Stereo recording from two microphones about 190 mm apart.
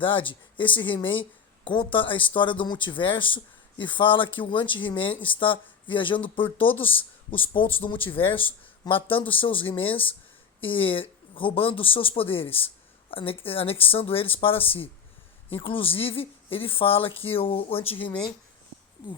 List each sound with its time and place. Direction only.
0.0 s speech: 25° left (ahead or behind)
9.6 s speech: 10° left (ahead or behind)
10.8 s speech: 30° left (ahead or behind)